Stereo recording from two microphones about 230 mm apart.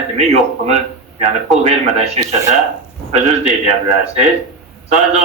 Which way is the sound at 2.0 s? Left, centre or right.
Right.